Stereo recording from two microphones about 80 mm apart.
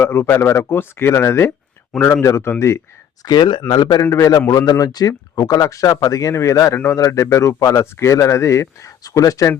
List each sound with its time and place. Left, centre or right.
0.0 s speech: left
3.2 s a man's voice: left
4.3 s speech: left